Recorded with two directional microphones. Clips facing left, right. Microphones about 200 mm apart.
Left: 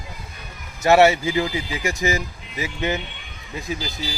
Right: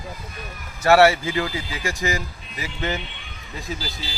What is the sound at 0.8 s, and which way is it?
Speech, 20° left (ahead or behind).